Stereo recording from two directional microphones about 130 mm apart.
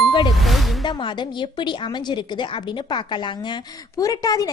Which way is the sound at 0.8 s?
40° left (ahead or behind).